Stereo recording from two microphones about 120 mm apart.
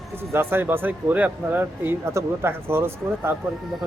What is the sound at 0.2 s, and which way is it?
Speech, 20° right (ahead or behind).